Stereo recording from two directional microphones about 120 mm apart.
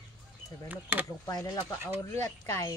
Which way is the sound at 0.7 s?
15° right (ahead or behind).